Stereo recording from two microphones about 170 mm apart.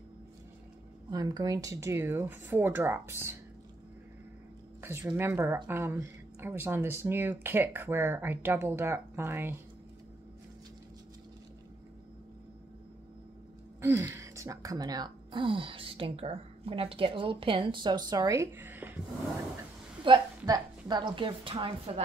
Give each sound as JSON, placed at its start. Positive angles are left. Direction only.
{"t": 1.1, "sound": "speech", "side_deg": -20}
{"t": 4.8, "sound": "speech", "side_deg": -15}
{"t": 13.7, "sound": "speech", "side_deg": -15}
{"t": 20.0, "sound": "a woman's voice", "side_deg": -25}